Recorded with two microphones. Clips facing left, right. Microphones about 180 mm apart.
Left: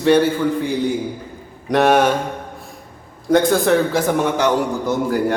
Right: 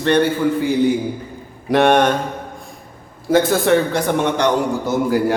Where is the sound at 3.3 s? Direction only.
Centre (ahead or behind).